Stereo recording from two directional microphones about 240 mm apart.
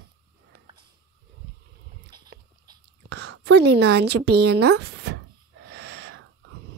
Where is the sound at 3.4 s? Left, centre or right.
Right.